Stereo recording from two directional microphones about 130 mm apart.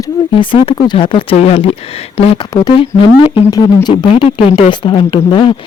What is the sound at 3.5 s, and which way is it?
Speech, 30° left (ahead or behind).